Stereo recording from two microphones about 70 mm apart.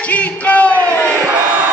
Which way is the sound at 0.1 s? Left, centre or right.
Left.